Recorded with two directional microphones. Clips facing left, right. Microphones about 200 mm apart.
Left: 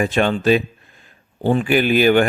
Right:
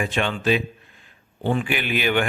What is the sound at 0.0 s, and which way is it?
A man's voice, 40° left (ahead or behind).